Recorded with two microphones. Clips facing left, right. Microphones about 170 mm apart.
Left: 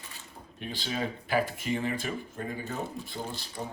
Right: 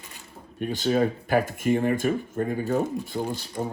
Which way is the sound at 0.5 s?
50° right (ahead or behind).